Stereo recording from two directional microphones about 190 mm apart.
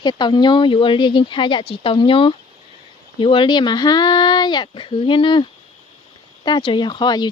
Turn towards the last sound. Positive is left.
turn(degrees=20)  # may be behind; listen again after turning